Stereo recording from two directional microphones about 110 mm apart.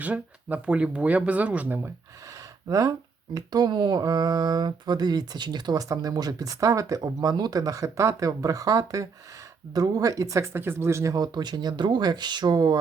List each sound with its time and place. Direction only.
0.0 s speech: 15° right (ahead or behind)
2.6 s speech: 30° right (ahead or behind)